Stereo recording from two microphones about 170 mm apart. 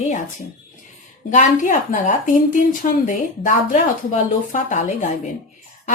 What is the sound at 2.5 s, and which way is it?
Speech, 50° left (ahead or behind).